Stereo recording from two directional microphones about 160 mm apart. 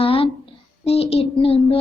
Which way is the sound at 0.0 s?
35° left (ahead or behind).